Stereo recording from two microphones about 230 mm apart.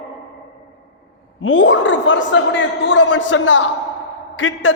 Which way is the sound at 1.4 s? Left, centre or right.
Left.